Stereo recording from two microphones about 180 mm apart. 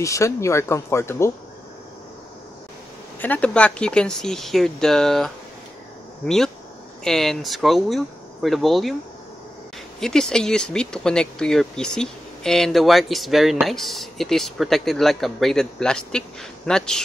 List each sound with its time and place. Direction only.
0.0 s speech: 15° left (ahead or behind)
3.2 s speech: 10° left (ahead or behind)
9.9 s speech: 5° left (ahead or behind)